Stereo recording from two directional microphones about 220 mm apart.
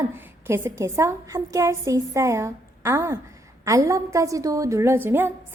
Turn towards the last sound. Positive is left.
turn(degrees=-10)  # may be behind; listen again after turning